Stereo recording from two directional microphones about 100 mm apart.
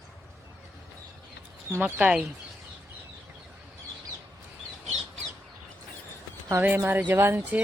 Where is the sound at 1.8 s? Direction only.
15° right (ahead or behind).